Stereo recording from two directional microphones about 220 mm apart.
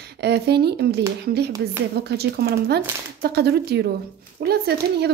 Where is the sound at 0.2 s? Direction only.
50° right (ahead or behind).